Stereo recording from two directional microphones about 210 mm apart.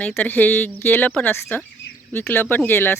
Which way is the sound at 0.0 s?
10° left (ahead or behind).